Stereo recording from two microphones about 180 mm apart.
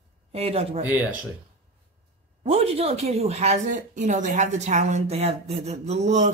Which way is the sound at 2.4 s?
35° right (ahead or behind).